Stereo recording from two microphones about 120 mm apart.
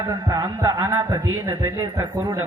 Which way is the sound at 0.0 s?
30° right (ahead or behind).